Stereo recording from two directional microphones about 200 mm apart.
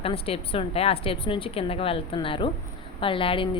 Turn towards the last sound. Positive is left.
turn(degrees=25)  # may be behind; listen again after turning